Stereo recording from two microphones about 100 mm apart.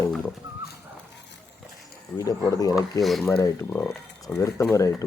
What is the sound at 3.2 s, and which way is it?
Speech, 25° left (ahead or behind).